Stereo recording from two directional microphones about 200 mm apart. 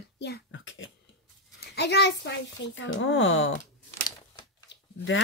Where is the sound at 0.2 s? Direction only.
60° left (ahead or behind).